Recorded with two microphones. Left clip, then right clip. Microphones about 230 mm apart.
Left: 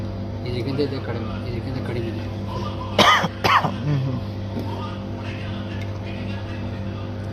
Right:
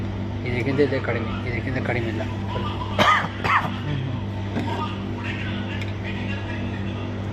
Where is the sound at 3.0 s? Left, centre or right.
Left.